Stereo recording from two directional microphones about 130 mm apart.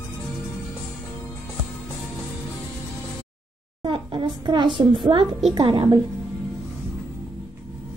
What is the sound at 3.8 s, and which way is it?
A child's voice, 40° right (ahead or behind).